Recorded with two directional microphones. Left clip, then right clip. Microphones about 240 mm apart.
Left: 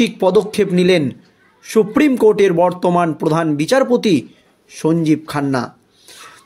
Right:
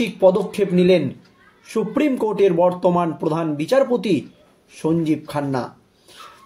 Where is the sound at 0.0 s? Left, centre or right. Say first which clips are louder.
Left 2 dB; left.